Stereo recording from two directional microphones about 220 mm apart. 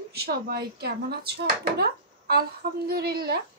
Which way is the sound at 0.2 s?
45° right (ahead or behind).